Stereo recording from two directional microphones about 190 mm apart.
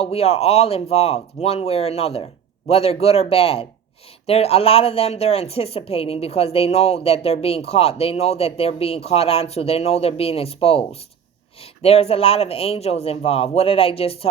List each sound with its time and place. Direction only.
0.0 s a woman's voice: 30° left (ahead or behind)